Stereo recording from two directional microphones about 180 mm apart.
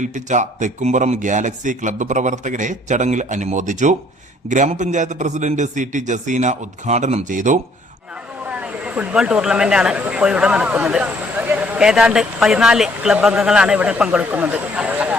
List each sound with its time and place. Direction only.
0.0 s speech: 45° right (ahead or behind)
8.4 s speech: 5° right (ahead or behind)